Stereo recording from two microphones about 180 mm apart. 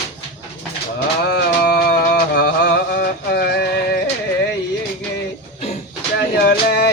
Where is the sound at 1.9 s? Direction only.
60° left (ahead or behind).